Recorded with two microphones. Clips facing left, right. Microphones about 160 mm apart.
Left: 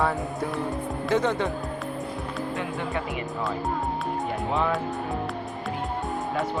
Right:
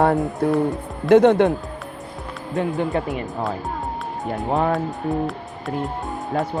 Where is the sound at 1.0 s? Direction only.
60° right (ahead or behind).